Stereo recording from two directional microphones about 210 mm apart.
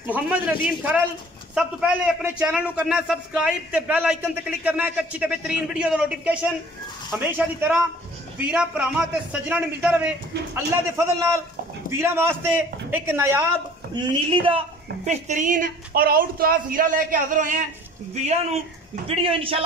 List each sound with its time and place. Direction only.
0.0 s a man's voice: 10° right (ahead or behind)
13.9 s speech: 25° right (ahead or behind)